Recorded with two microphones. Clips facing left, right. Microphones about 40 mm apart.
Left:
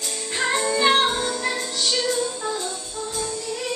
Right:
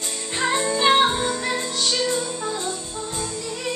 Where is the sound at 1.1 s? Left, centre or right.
Right.